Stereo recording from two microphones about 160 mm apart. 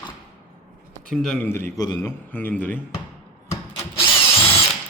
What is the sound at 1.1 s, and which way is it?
Speech, centre (ahead or behind).